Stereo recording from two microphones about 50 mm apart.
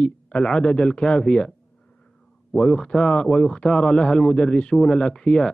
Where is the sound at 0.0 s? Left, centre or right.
Centre.